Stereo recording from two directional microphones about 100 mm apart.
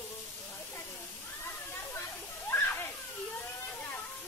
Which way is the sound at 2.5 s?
25° left (ahead or behind).